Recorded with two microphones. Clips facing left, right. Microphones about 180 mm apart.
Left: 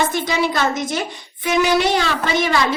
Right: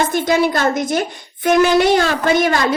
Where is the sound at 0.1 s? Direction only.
50° right (ahead or behind).